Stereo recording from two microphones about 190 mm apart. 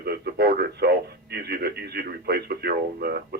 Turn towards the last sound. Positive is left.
turn(degrees=-55)  # may be behind; listen again after turning